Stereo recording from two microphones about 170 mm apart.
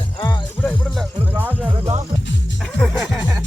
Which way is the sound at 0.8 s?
Centre (ahead or behind).